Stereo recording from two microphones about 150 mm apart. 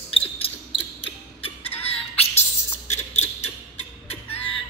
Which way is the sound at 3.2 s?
45° left (ahead or behind).